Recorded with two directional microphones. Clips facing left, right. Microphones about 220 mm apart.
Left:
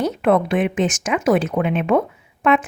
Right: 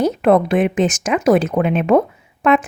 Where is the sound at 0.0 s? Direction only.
40° right (ahead or behind).